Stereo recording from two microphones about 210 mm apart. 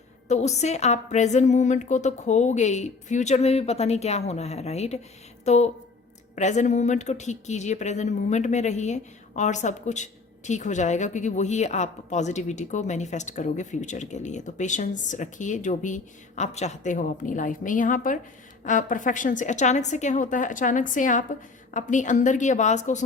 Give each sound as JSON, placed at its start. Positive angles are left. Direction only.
{"t": 0.3, "sound": "speech", "side_deg": 35}